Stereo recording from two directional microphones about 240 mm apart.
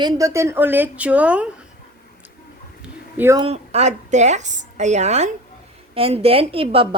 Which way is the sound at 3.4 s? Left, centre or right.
Right.